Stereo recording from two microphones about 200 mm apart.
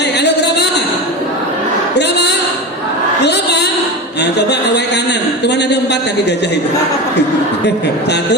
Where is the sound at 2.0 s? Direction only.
55° left (ahead or behind).